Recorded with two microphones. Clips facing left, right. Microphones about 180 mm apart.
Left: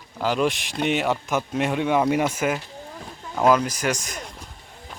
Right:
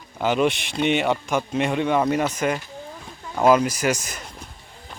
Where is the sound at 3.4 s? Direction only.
5° right (ahead or behind).